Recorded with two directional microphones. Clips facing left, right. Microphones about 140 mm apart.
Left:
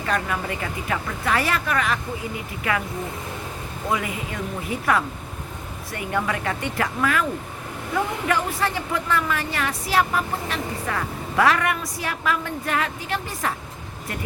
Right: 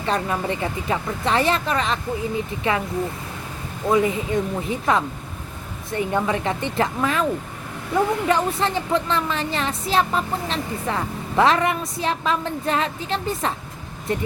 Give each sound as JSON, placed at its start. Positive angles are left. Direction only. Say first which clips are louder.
{"t": 0.0, "sound": "speech", "louder": "right 2 dB", "side_deg": -25}
{"t": 3.9, "sound": "speech", "louder": "right 9 dB", "side_deg": -30}
{"t": 8.3, "sound": "speech", "louder": "right 3 dB", "side_deg": -25}